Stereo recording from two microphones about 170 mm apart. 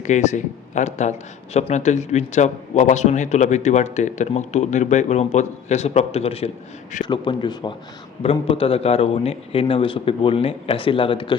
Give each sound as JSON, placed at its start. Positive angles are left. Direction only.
{"t": 0.0, "sound": "a man's voice", "side_deg": 45}